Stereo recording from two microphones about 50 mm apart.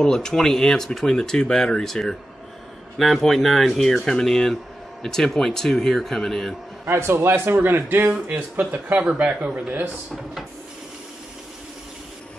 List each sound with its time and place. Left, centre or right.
0.0 s speech: centre
6.9 s a man's voice: right
9.0 s speech: right